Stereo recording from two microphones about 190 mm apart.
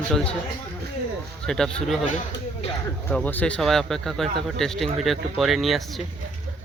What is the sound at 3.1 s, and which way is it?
Speech, 10° left (ahead or behind).